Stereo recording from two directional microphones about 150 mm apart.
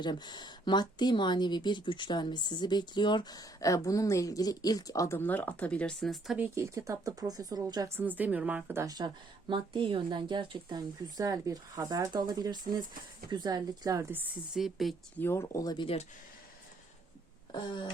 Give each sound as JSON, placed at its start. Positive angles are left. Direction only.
{"t": 0.0, "sound": "speech", "side_deg": 30}
{"t": 7.9, "sound": "a woman's voice", "side_deg": -10}
{"t": 14.5, "sound": "speech", "side_deg": 0}
{"t": 15.2, "sound": "speech", "side_deg": 15}
{"t": 17.5, "sound": "a sound", "side_deg": 30}